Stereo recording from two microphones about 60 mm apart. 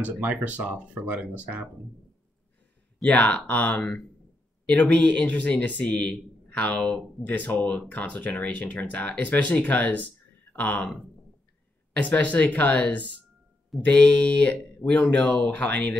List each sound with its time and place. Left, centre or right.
0.0 s speech: right
3.0 s a man's voice: left
12.0 s a man's voice: left